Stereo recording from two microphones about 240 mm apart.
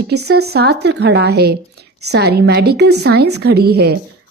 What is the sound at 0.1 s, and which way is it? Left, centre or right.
Speech, right.